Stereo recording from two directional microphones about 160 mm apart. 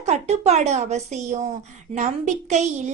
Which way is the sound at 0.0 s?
45° right (ahead or behind).